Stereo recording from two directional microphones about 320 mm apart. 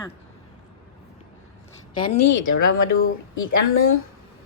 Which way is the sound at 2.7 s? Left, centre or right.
Left.